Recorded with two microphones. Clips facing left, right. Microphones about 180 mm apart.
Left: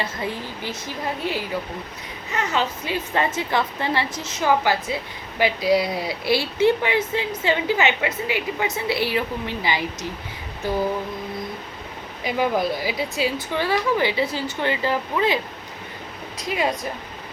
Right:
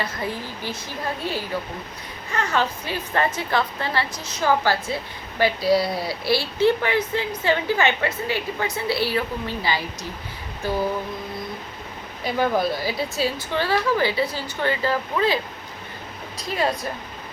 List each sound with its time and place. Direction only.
0.0 s a woman's voice: 20° left (ahead or behind)
2.3 s a woman's voice: 20° left (ahead or behind)
12.2 s a woman's voice: 15° left (ahead or behind)
16.4 s a woman's voice: 15° left (ahead or behind)